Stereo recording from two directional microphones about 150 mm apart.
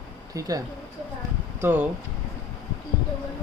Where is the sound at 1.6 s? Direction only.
15° right (ahead or behind).